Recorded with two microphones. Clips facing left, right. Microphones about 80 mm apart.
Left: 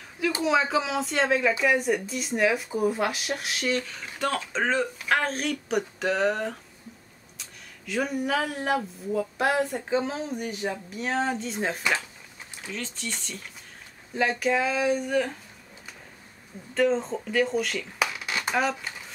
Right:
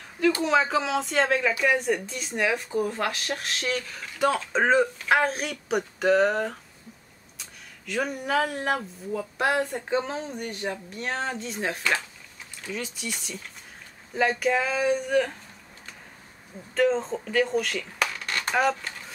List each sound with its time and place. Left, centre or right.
0.4 s speech: centre
4.5 s speech: centre
5.0 s speech: centre
16.7 s speech: centre